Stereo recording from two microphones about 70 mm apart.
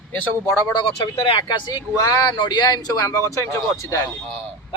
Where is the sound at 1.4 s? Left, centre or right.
Left.